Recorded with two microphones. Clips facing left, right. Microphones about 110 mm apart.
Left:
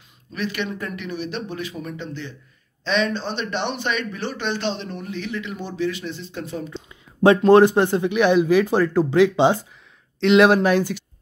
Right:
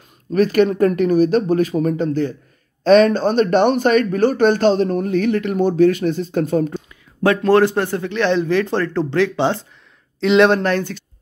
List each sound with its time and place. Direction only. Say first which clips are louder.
0.3 s a man's voice: right 13 dB; 45° right (ahead or behind)
7.2 s speech: left 1 dB; 20° left (ahead or behind)
10.2 s speech: right 1 dB; centre (ahead or behind)